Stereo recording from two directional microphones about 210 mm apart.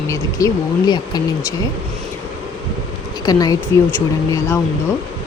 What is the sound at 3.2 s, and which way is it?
Speech, 15° left (ahead or behind).